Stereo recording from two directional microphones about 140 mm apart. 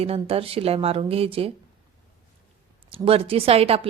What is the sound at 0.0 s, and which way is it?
Speech, 45° right (ahead or behind).